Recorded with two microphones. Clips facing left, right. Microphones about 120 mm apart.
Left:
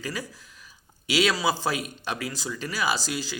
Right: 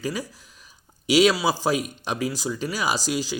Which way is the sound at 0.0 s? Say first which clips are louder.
Right 5 dB; 20° right (ahead or behind).